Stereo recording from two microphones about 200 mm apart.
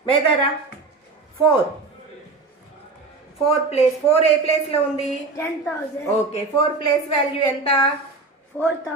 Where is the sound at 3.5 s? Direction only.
30° left (ahead or behind).